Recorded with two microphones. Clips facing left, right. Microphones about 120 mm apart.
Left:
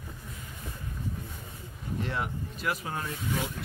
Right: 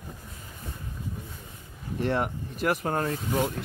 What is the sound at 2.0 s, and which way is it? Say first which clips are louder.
Speech: right 7 dB; 50° right (ahead or behind).